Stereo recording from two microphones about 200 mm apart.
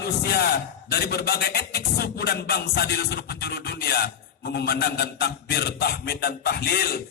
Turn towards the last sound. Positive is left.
turn(degrees=50)  # may be behind; listen again after turning